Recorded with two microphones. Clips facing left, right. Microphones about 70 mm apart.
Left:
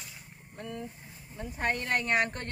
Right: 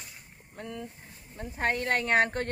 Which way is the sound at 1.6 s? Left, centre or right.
Right.